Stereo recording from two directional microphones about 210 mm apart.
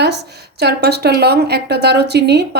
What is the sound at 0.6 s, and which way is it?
Speech, 50° right (ahead or behind).